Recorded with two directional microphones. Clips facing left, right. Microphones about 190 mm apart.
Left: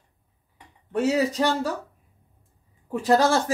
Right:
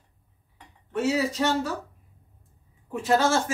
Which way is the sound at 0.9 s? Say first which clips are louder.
Left 3 dB; 35° left (ahead or behind).